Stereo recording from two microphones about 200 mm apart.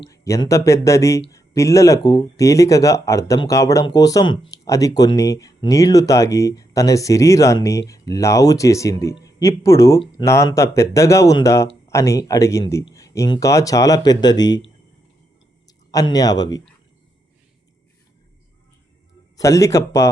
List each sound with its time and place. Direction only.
0.0 s speech: 15° left (ahead or behind)
19.4 s speech: 15° left (ahead or behind)